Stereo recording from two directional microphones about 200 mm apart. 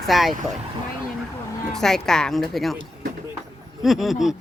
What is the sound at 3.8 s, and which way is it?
Speech, centre (ahead or behind).